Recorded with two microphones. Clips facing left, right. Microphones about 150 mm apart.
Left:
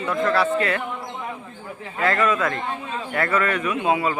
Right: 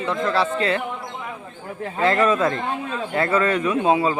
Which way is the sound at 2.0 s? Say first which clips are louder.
Right 3 dB; 25° right (ahead or behind).